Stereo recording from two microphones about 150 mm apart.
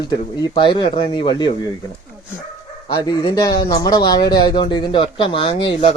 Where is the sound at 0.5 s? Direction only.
35° left (ahead or behind).